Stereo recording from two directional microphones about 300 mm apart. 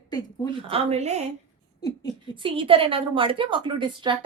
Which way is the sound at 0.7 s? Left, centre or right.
Right.